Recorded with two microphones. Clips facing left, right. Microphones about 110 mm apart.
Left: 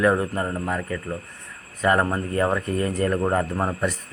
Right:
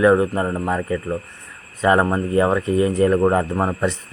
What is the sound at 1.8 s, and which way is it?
A man's voice, 20° right (ahead or behind).